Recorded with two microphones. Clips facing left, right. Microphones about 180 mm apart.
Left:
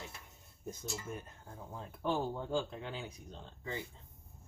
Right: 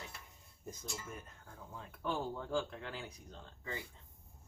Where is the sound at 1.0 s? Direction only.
25° left (ahead or behind).